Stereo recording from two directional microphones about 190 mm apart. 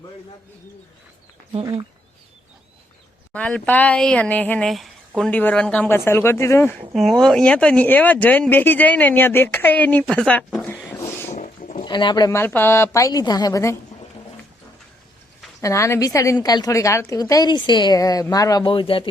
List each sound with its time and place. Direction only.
1.6 s speech: 25° right (ahead or behind)
3.3 s speech: 5° left (ahead or behind)
6.9 s speech: centre (ahead or behind)
10.9 s a sound: 15° left (ahead or behind)
11.3 s pig: 40° left (ahead or behind)
11.9 s speech: 25° left (ahead or behind)
15.6 s a woman's voice: 15° left (ahead or behind)